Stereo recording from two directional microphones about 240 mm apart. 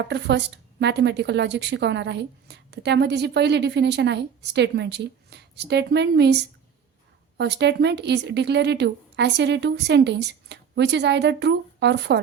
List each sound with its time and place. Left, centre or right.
0.1 s a woman's voice: right